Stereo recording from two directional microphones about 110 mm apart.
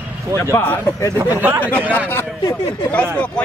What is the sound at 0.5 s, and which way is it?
Speech, 15° left (ahead or behind).